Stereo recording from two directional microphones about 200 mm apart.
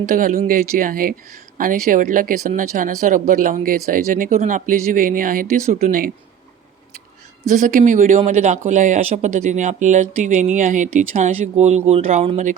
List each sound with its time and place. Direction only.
0.0 s speech: 40° right (ahead or behind)
7.5 s speech: 40° right (ahead or behind)